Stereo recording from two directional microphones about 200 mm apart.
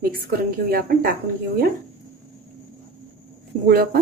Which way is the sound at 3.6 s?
50° right (ahead or behind).